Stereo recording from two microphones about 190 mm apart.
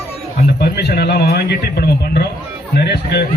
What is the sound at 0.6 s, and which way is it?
A man's voice, 55° left (ahead or behind).